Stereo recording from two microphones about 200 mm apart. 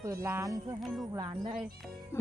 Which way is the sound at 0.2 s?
10° right (ahead or behind).